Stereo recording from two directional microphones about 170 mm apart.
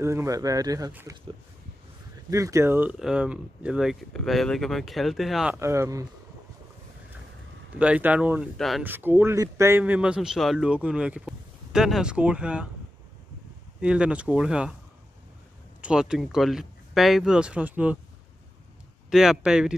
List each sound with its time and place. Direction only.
0.0 s speech: 15° right (ahead or behind)
2.3 s speech: 15° right (ahead or behind)
5.6 s a man's voice: 15° right (ahead or behind)
7.8 s a man's voice: 5° right (ahead or behind)
8.8 s a man's voice: 10° right (ahead or behind)
13.7 s speech: 5° right (ahead or behind)
15.8 s speech: 5° right (ahead or behind)
19.0 s speech: centre (ahead or behind)